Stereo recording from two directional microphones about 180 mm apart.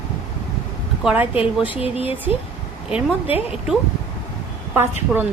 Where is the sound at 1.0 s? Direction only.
10° right (ahead or behind).